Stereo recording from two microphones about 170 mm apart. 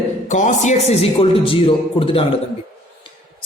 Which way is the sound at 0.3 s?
45° left (ahead or behind).